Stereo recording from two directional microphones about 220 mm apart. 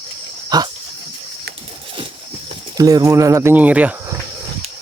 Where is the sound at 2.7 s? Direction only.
15° right (ahead or behind).